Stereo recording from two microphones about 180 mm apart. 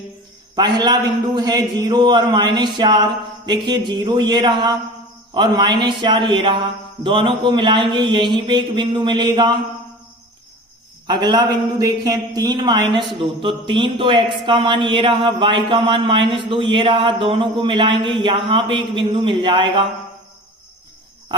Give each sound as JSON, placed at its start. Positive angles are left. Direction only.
{"t": 0.5, "sound": "a man's voice", "side_deg": -25}
{"t": 11.0, "sound": "a man's voice", "side_deg": -25}